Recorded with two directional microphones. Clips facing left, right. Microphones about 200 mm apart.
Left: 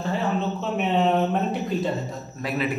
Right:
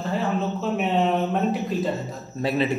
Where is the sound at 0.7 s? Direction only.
Centre (ahead or behind).